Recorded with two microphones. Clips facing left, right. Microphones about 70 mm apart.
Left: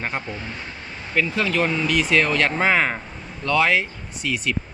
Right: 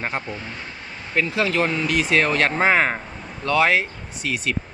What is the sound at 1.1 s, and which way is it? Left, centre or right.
Speech, right.